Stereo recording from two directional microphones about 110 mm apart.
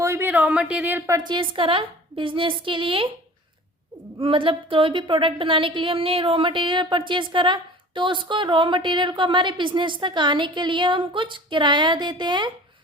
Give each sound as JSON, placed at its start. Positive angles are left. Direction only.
{"t": 0.0, "sound": "speech", "side_deg": -25}
{"t": 1.0, "sound": "speech", "side_deg": -35}
{"t": 4.2, "sound": "speech", "side_deg": -50}